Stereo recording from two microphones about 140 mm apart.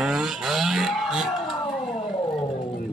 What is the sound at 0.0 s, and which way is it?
Vehicle, 5° right (ahead or behind).